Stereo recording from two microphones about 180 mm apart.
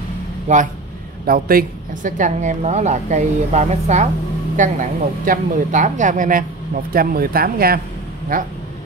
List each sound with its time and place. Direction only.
0.5 s a woman's voice: 40° right (ahead or behind)
1.2 s a woman's voice: 55° right (ahead or behind)